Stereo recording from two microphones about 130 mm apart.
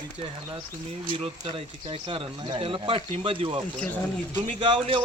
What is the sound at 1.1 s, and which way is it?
A man's voice, 40° right (ahead or behind).